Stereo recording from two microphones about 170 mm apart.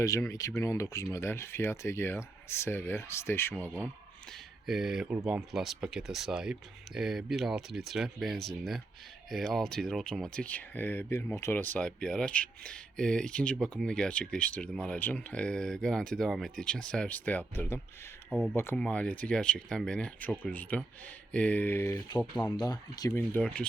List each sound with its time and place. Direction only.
0.0 s speech: 20° left (ahead or behind)
4.3 s speech: centre (ahead or behind)
18.3 s speech: centre (ahead or behind)
18.5 s speech: 15° left (ahead or behind)
22.4 s speech: 25° left (ahead or behind); by 23.6 s 10° left (ahead or behind)